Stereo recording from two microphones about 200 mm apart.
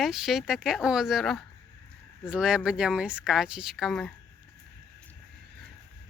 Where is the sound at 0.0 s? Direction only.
Centre (ahead or behind).